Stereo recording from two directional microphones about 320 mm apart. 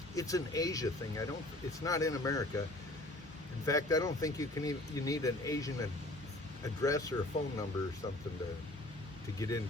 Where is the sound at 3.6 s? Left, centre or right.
Centre.